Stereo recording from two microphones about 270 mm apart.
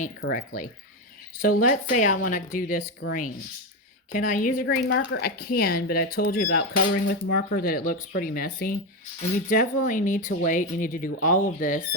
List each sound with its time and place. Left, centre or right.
0.0 s speech: left